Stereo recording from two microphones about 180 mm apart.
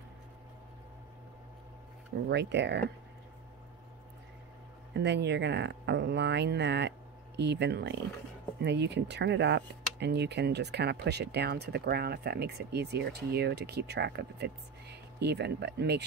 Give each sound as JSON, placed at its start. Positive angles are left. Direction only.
{"t": 2.2, "sound": "speech", "side_deg": -70}
{"t": 4.9, "sound": "speech", "side_deg": -70}